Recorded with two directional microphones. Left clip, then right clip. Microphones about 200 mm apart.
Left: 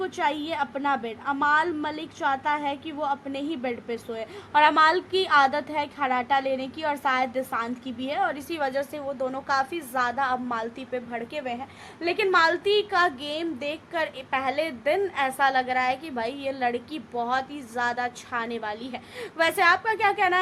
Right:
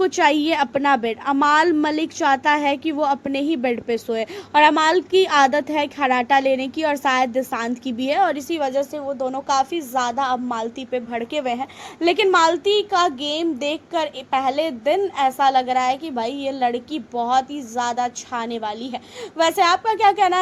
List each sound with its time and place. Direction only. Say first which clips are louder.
0.0 s a woman's voice: right 10 dB; 30° right (ahead or behind)